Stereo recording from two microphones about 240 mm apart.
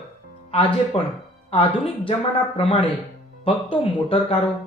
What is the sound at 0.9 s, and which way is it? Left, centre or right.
Speech, left.